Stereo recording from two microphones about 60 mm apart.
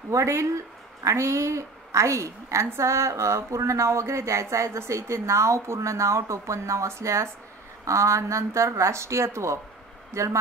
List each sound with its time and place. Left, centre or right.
0.1 s a woman's voice: right